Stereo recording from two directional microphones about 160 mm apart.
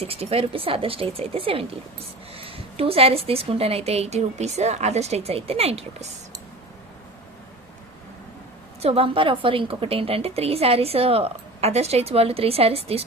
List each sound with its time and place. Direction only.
0.0 s a woman's voice: 40° right (ahead or behind)
8.8 s a woman's voice: 40° right (ahead or behind)